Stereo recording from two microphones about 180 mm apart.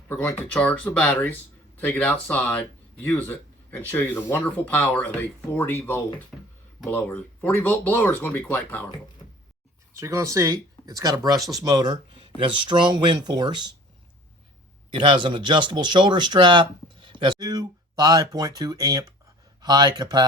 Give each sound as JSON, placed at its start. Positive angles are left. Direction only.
{"t": 0.1, "sound": "speech", "side_deg": 10}
{"t": 10.0, "sound": "speech", "side_deg": -20}
{"t": 14.8, "sound": "speech", "side_deg": -25}